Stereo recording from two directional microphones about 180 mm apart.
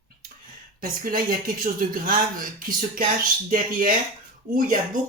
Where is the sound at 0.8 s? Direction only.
50° right (ahead or behind).